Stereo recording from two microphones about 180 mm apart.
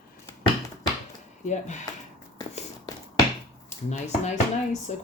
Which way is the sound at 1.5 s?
40° left (ahead or behind).